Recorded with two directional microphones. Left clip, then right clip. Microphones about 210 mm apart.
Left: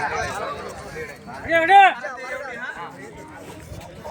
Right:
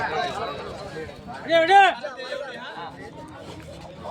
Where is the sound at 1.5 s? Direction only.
35° left (ahead or behind).